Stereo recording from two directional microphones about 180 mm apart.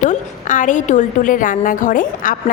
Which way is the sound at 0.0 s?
45° left (ahead or behind).